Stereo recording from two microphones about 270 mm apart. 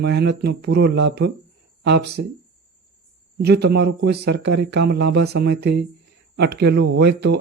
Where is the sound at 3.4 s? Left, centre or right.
Right.